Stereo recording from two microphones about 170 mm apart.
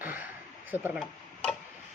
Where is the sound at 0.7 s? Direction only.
10° right (ahead or behind).